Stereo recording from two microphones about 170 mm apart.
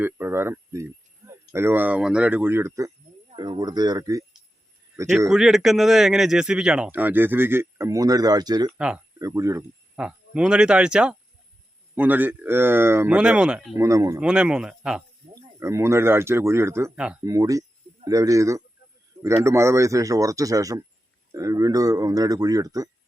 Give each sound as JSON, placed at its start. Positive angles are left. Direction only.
{"t": 0.0, "sound": "speech", "side_deg": -15}
{"t": 1.2, "sound": "a sound", "side_deg": -20}
{"t": 1.5, "sound": "speech", "side_deg": -15}
{"t": 5.3, "sound": "speech", "side_deg": 0}
{"t": 9.9, "sound": "speech", "side_deg": -5}
{"t": 13.7, "sound": "speech", "side_deg": -20}
{"t": 14.2, "sound": "speech", "side_deg": -5}
{"t": 15.4, "sound": "speech", "side_deg": -15}
{"t": 17.2, "sound": "speech", "side_deg": -20}